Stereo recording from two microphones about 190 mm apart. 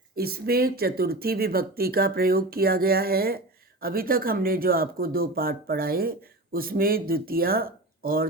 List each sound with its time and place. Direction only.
0.2 s speech: 55° right (ahead or behind)